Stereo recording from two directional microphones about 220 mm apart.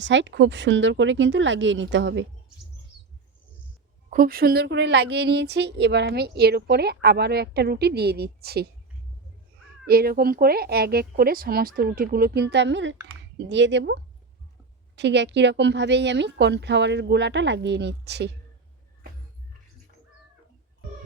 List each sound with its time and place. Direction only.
0.0 s speech: 55° right (ahead or behind)
4.1 s speech: 40° right (ahead or behind)
9.8 s speech: 45° right (ahead or behind)